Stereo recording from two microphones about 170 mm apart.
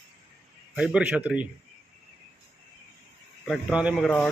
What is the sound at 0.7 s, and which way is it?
Speech, 5° right (ahead or behind).